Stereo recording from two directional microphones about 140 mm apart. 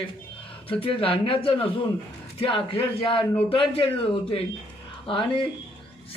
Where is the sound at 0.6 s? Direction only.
40° left (ahead or behind).